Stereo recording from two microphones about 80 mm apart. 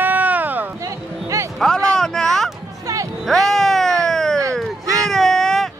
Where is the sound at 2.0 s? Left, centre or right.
Centre.